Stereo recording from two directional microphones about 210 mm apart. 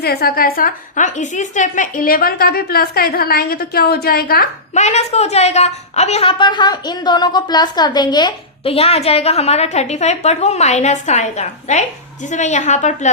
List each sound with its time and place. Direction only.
0.0 s a woman's voice: 50° left (ahead or behind)